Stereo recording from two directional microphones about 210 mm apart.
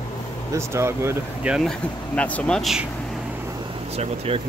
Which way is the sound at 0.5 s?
15° right (ahead or behind).